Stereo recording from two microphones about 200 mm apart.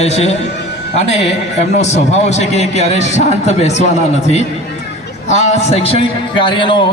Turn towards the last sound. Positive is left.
turn(degrees=25)  # may be behind; listen again after turning